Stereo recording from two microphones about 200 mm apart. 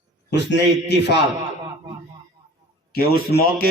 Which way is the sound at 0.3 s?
55° left (ahead or behind).